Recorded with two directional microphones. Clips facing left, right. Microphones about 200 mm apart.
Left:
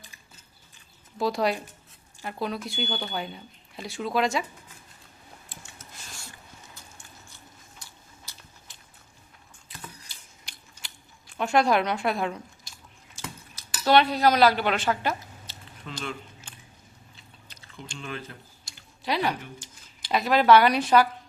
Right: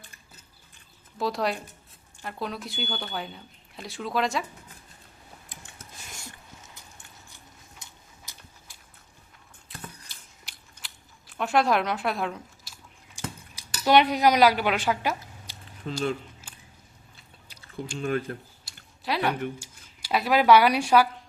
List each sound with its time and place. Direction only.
1.2 s speech: centre (ahead or behind)
7.9 s biting: 15° right (ahead or behind)
9.6 s biting: centre (ahead or behind)
15.9 s speech: 40° right (ahead or behind)
16.5 s a sound: 5° right (ahead or behind)
17.9 s speech: 45° right (ahead or behind)
18.6 s a sound: 5° right (ahead or behind)
19.5 s speech: 10° right (ahead or behind)